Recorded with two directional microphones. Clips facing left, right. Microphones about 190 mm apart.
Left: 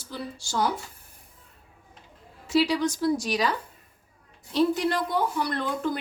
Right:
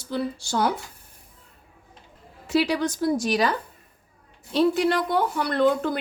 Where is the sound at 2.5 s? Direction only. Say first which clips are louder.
Right 1 dB; 55° right (ahead or behind).